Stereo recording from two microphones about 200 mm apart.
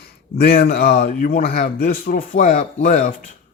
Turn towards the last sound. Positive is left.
turn(degrees=40)  # may be behind; listen again after turning